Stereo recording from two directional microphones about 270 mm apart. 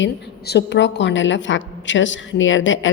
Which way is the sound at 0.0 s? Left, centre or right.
Left.